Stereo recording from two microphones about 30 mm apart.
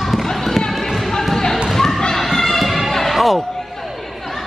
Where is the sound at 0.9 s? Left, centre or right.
Centre.